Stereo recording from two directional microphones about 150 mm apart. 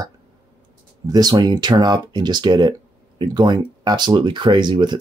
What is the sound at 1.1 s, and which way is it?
Speech, 25° right (ahead or behind).